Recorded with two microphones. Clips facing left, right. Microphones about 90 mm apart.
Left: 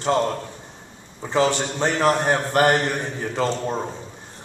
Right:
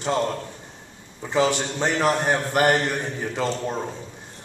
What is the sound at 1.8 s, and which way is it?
Speech, 40° left (ahead or behind).